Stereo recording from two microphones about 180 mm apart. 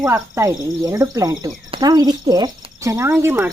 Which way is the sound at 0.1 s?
15° right (ahead or behind).